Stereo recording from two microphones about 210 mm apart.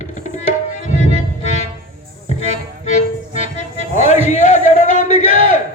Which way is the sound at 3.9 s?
35° left (ahead or behind).